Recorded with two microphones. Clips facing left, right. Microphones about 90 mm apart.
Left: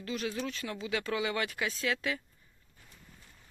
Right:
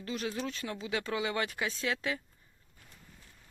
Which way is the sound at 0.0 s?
35° right (ahead or behind).